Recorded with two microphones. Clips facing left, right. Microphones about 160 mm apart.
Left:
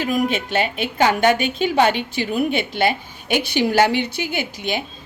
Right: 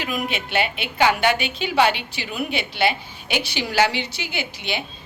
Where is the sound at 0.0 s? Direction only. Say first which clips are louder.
Left 6 dB; 45° left (ahead or behind).